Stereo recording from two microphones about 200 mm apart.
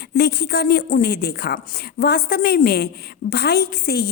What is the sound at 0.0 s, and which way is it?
A woman's voice, 50° left (ahead or behind).